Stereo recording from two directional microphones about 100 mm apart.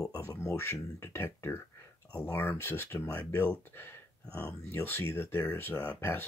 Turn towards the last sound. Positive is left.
turn(degrees=20)  # may be behind; listen again after turning